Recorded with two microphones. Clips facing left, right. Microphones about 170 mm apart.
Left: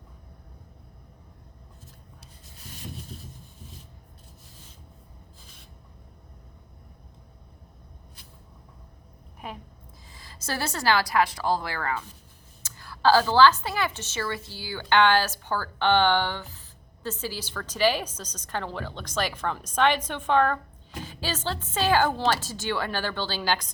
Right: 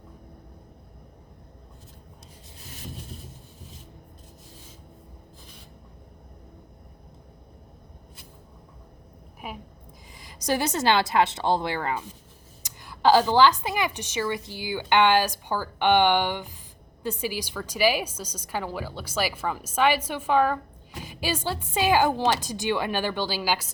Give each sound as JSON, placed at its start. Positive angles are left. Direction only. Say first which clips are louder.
{"t": 9.4, "sound": "a woman's voice", "louder": "right 1 dB", "side_deg": -10}